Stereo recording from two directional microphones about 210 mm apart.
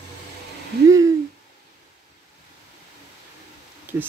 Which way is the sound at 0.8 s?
15° right (ahead or behind).